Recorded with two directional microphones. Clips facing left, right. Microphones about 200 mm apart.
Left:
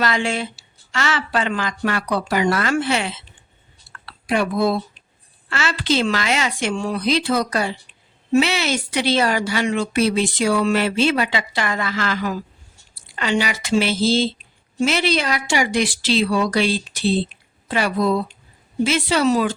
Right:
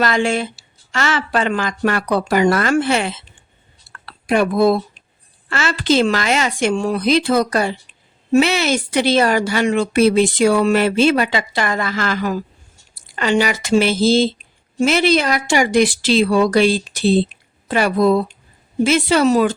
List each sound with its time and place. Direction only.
0.0 s speech: 45° right (ahead or behind)